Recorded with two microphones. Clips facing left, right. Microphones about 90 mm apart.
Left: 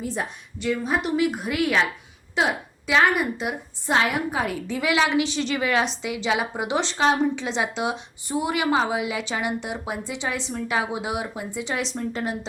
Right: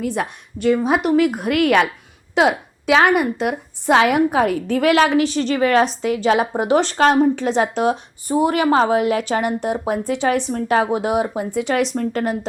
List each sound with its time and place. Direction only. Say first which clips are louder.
0.0 s a woman's voice: right 6 dB; 65° right (ahead or behind)
1.2 s a woman's voice: right 6 dB; 55° right (ahead or behind)